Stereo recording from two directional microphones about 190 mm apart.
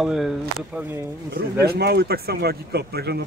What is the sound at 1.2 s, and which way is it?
Speech, 55° right (ahead or behind).